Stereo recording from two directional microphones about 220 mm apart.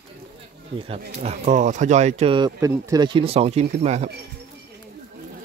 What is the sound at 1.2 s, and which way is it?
Speech, 30° right (ahead or behind).